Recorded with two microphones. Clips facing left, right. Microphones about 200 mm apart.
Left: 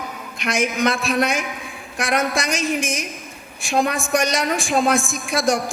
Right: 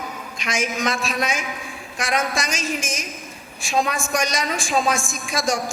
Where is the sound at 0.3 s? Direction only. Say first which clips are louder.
Left 4 dB; 60° left (ahead or behind).